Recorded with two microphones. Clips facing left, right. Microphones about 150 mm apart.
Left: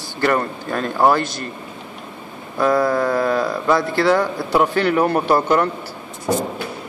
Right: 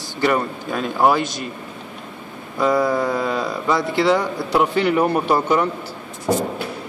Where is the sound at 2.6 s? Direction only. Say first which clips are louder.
Left 1 dB; 20° right (ahead or behind).